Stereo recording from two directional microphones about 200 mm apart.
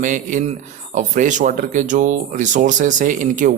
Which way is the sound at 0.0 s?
40° right (ahead or behind).